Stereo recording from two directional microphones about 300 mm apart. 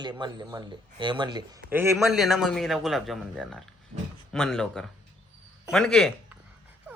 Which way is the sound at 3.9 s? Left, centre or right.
Right.